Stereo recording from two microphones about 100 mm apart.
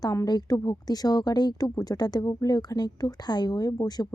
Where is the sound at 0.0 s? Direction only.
35° left (ahead or behind).